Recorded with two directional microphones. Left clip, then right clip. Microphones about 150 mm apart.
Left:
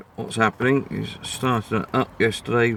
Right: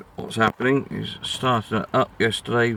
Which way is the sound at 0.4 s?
15° left (ahead or behind).